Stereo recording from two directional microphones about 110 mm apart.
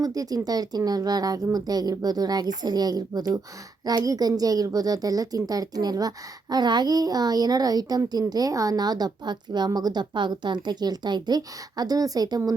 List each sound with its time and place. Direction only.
0.0 s speech: 35° right (ahead or behind)